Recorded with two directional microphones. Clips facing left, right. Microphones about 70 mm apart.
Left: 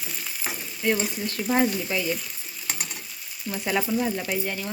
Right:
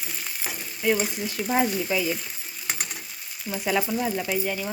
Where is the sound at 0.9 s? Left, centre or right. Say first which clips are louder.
Right 1 dB; centre.